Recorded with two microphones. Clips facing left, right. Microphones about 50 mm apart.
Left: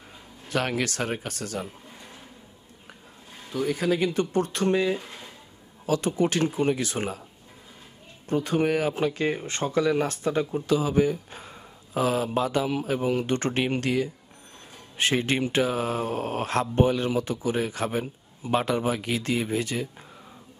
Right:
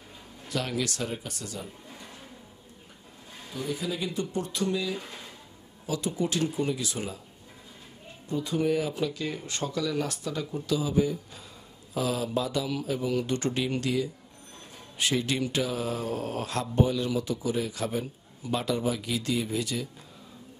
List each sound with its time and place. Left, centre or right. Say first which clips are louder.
0.5 s speech: left 4 dB; left
3.5 s speech: left 7 dB; left
8.3 s speech: left 3 dB; left
8.9 s speech: left 5 dB; left